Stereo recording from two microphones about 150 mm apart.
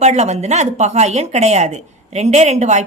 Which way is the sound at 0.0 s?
50° right (ahead or behind).